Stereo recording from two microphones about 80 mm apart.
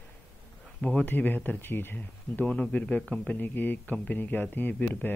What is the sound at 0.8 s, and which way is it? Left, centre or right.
Speech, centre.